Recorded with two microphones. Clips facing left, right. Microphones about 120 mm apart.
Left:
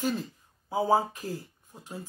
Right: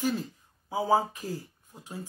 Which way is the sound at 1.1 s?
15° left (ahead or behind).